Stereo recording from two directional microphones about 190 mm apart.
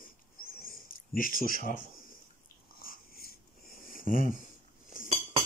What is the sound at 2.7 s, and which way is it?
Dog, 50° left (ahead or behind).